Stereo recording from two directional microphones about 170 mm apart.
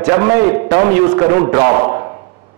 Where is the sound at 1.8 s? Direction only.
30° right (ahead or behind).